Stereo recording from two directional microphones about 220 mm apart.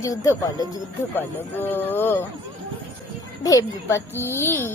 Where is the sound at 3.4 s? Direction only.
15° left (ahead or behind).